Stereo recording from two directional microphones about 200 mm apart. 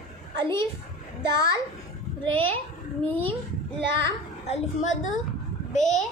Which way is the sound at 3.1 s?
10° left (ahead or behind).